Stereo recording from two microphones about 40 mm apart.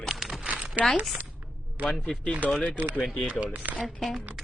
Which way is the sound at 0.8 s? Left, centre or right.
Right.